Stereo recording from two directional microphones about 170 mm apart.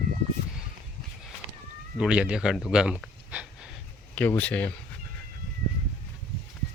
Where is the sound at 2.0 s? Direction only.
5° right (ahead or behind).